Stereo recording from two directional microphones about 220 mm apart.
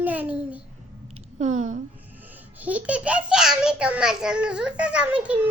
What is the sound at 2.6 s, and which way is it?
A child's voice, 5° right (ahead or behind).